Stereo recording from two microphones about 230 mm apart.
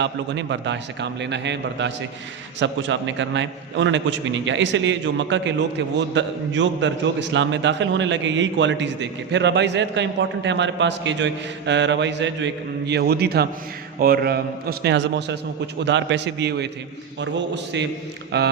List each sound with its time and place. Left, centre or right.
0.0 s a man's voice: right